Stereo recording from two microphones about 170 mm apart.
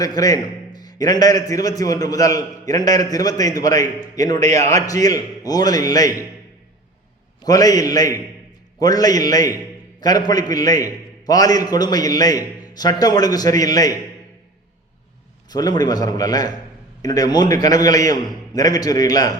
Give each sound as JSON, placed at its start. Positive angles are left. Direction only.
{"t": 0.0, "sound": "a man's voice", "side_deg": 20}
{"t": 7.4, "sound": "a man's voice", "side_deg": 20}
{"t": 15.4, "sound": "a man's voice", "side_deg": 25}